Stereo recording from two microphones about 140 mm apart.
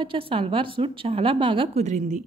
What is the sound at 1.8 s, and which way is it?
Speech, 60° right (ahead or behind).